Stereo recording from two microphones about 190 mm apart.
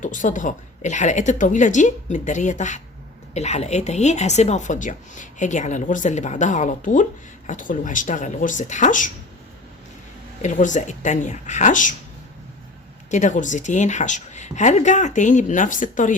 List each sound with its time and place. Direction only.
0.0 s a woman's voice: 40° left (ahead or behind)
10.4 s a woman's voice: 40° left (ahead or behind)
13.1 s a woman's voice: 40° left (ahead or behind)